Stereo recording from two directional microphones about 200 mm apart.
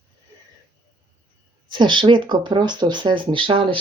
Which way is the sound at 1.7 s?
25° right (ahead or behind).